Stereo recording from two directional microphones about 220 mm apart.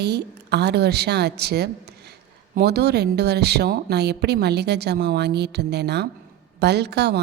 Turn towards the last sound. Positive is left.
turn(degrees=-50)  # may be behind; listen again after turning